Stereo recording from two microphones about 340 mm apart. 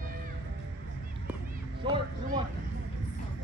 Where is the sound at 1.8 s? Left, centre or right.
Centre.